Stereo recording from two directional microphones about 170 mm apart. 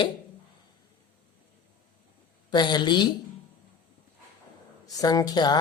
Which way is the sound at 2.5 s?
25° left (ahead or behind).